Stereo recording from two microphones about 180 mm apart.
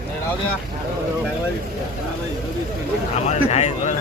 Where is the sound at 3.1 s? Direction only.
40° left (ahead or behind).